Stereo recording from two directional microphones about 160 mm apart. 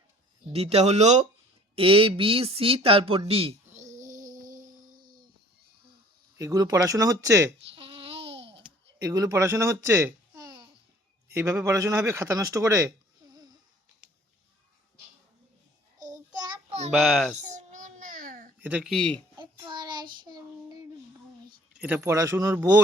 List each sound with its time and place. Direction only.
0.5 s speech: 40° right (ahead or behind)
3.2 s a sound: 35° right (ahead or behind); by 5.2 s 60° right (ahead or behind)
6.3 s speech: 20° right (ahead or behind)
7.8 s babbling: 35° right (ahead or behind)
9.0 s a child's voice: 20° right (ahead or behind)
16.1 s child singing: 25° right (ahead or behind)
16.6 s a sound: 45° right (ahead or behind)
16.9 s a child's voice: centre (ahead or behind)
17.3 s babbling: 50° right (ahead or behind)
18.6 s speech: 10° right (ahead or behind)
18.9 s speech: 5° left (ahead or behind)
19.4 s child singing: 30° right (ahead or behind)
21.7 s speech: 10° right (ahead or behind)